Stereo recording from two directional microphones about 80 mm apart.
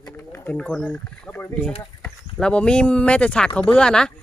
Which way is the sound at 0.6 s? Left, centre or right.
Centre.